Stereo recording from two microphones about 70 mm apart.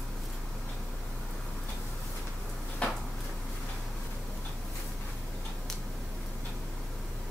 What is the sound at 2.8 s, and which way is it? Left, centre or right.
Drawer open or close, centre.